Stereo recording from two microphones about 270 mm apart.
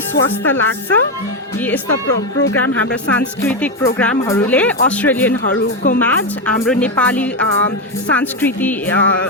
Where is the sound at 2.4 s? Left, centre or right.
Left.